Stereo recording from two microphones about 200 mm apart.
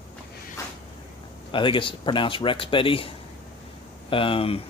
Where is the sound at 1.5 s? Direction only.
25° left (ahead or behind).